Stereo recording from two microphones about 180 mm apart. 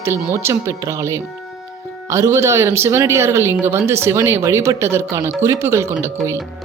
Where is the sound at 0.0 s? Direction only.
15° right (ahead or behind).